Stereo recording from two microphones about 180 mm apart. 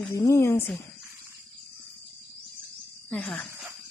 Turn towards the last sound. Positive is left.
turn(degrees=5)  # may be behind; listen again after turning